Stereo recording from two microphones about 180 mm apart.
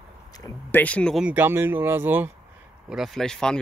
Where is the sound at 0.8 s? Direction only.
5° left (ahead or behind).